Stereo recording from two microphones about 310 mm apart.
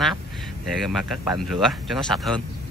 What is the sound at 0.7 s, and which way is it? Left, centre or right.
Speech, centre.